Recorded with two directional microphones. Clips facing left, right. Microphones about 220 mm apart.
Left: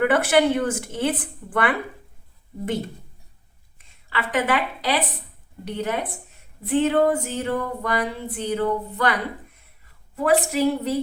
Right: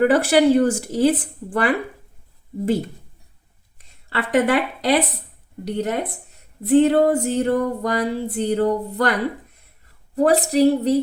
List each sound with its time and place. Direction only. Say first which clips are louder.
0.0 s speech: right 3 dB; 35° right (ahead or behind)
3.8 s speech: right 3 dB; 40° right (ahead or behind)
10.2 s speech: right 4 dB; 40° right (ahead or behind)